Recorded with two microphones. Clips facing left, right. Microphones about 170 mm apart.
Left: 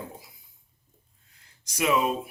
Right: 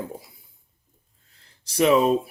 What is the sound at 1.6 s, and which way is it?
Speech, 30° right (ahead or behind).